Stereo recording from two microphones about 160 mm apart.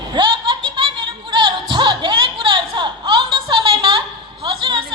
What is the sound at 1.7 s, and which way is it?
Music, 30° right (ahead or behind).